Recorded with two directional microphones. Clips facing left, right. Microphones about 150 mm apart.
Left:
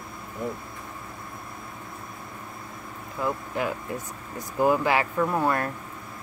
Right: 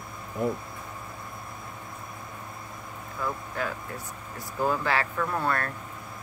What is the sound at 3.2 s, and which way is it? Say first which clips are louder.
Speech: left 4 dB; 15° left (ahead or behind).